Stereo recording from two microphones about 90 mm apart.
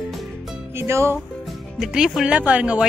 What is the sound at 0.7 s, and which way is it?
Speech, 30° right (ahead or behind).